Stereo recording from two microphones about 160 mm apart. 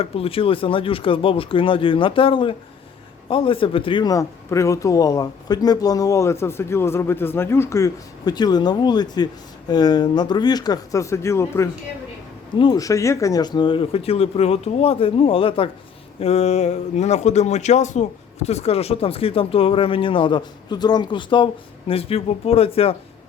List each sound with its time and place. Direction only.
0.0 s speech: 35° left (ahead or behind)